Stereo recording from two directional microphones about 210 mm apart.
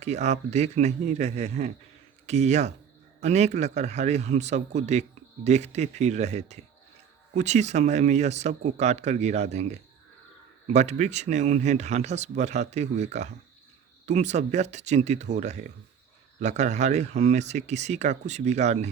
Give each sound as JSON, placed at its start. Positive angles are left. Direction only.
{"t": 0.0, "sound": "a man's voice", "side_deg": -30}